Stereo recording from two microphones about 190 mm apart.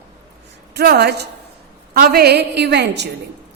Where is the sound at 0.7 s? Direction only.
60° right (ahead or behind).